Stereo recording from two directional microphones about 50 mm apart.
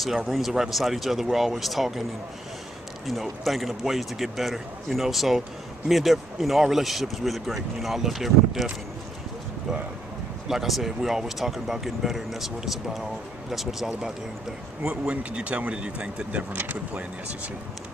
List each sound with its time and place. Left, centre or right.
0.0 s speech: centre
3.1 s speech: centre
10.5 s speech: centre
14.8 s speech: right
16.5 s speech: right